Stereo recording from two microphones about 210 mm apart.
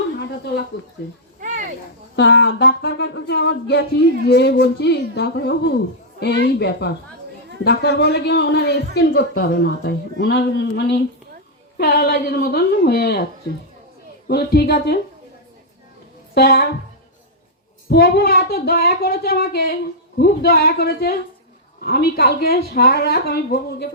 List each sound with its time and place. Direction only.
2.1 s a man's voice: 55° left (ahead or behind)
14.3 s a man's voice: 50° left (ahead or behind)
16.3 s a man's voice: 45° left (ahead or behind)
17.8 s a man's voice: 50° left (ahead or behind)